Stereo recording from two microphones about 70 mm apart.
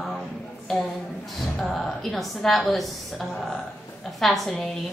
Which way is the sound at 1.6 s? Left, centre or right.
Centre.